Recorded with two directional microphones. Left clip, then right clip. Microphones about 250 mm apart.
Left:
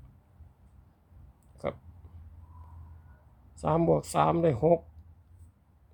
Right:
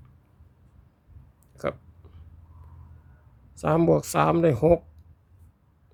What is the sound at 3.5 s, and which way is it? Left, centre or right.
Speech, right.